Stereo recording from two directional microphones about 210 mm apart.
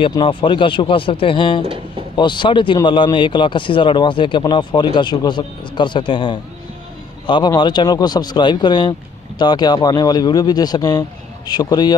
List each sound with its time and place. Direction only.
0.0 s speech: 25° left (ahead or behind)
1.6 s speech: 25° right (ahead or behind)
2.1 s speech: 20° left (ahead or behind)